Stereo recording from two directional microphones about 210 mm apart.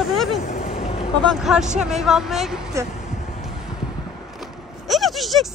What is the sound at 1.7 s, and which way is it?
Speech, 5° right (ahead or behind).